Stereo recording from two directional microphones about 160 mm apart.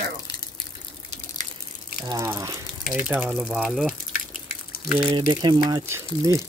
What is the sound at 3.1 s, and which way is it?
Speech, 10° right (ahead or behind).